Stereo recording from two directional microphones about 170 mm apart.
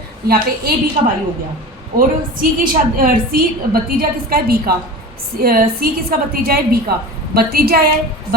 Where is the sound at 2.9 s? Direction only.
60° right (ahead or behind).